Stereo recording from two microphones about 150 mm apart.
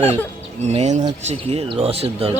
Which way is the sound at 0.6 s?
45° right (ahead or behind).